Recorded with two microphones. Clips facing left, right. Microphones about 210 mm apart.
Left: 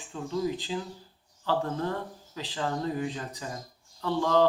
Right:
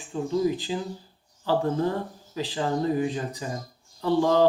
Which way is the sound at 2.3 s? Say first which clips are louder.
Right 5 dB; 10° right (ahead or behind).